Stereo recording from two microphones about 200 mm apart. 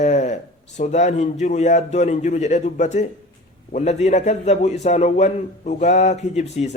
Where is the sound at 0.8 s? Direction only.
35° left (ahead or behind).